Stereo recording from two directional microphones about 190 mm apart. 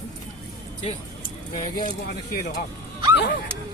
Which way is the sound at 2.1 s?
55° left (ahead or behind).